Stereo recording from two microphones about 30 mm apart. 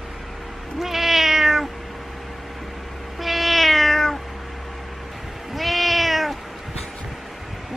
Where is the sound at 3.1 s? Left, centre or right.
Centre.